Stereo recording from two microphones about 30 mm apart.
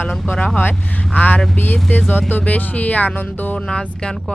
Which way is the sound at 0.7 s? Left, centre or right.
Left.